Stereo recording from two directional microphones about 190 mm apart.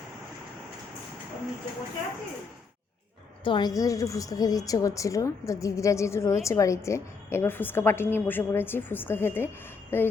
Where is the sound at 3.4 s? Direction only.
25° left (ahead or behind).